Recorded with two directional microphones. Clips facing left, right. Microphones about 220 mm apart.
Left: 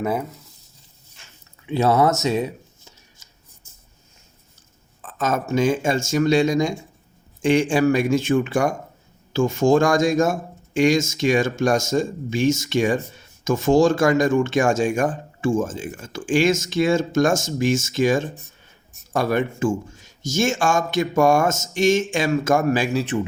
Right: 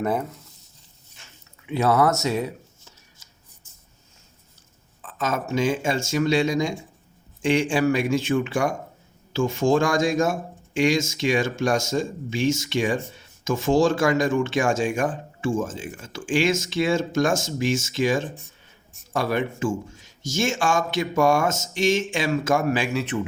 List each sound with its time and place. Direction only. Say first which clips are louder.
0.0 s speech: left 1 dB; 5° left (ahead or behind)
1.6 s speech: left 2 dB; 30° left (ahead or behind)
5.0 s speech: left 3 dB; 45° left (ahead or behind)